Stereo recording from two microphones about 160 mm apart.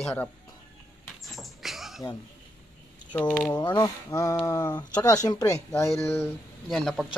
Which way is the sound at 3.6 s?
25° left (ahead or behind).